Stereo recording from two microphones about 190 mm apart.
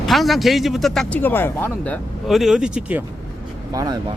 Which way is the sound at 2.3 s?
Centre (ahead or behind).